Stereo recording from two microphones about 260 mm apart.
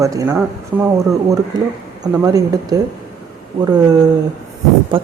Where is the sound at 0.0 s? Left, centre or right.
Centre.